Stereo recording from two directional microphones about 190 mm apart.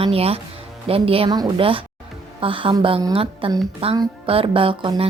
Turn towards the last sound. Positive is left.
turn(degrees=-25)  # may be behind; listen again after turning